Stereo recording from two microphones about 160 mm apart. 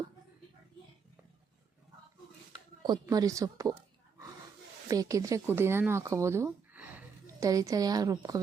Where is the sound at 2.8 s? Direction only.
25° right (ahead or behind).